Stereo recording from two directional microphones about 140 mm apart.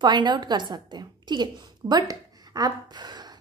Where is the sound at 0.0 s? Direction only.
30° right (ahead or behind).